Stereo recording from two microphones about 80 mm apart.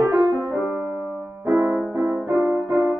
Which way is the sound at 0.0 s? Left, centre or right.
Right.